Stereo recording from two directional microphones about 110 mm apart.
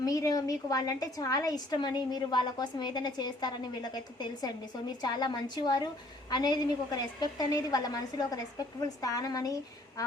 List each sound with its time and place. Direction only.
0.0 s a woman's voice: 35° left (ahead or behind)